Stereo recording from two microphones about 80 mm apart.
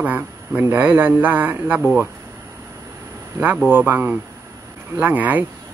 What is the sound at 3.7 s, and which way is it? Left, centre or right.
Speech, right.